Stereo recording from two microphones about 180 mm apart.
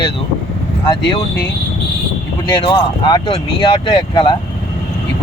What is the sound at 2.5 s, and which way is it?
Speech, 25° left (ahead or behind).